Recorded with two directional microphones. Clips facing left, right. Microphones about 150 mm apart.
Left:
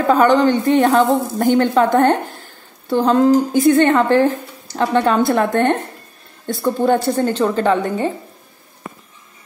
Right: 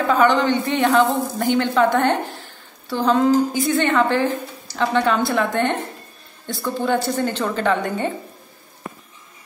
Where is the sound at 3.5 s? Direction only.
50° left (ahead or behind).